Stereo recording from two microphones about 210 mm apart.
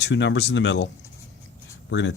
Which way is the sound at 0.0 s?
60° left (ahead or behind).